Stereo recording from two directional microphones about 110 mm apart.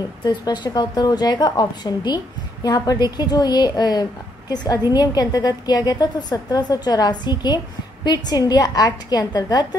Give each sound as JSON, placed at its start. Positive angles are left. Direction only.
{"t": 0.2, "sound": "a woman's voice", "side_deg": 40}